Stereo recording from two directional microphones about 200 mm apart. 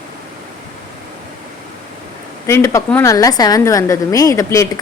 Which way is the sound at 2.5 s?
15° left (ahead or behind).